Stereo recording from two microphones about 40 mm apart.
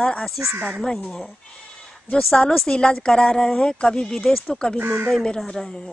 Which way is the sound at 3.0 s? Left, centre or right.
Centre.